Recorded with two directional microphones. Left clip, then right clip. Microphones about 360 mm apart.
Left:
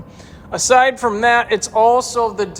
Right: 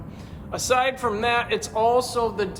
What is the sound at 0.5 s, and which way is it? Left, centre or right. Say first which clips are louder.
Speech: left 9 dB; left.